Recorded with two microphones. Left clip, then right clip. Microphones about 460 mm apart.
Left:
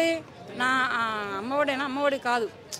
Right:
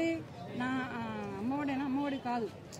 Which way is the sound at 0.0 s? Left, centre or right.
Left.